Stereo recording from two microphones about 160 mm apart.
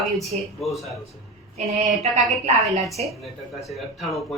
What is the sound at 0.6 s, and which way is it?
Speech, centre (ahead or behind).